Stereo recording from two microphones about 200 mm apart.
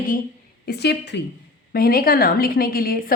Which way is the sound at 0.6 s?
55° left (ahead or behind).